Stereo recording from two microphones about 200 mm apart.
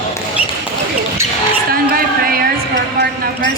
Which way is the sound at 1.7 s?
50° right (ahead or behind).